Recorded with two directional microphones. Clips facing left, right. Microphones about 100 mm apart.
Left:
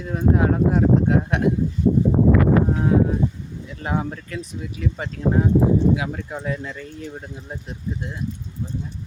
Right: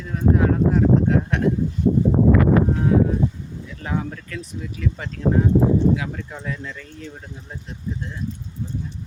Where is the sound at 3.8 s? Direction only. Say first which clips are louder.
Left 2 dB; 25° left (ahead or behind).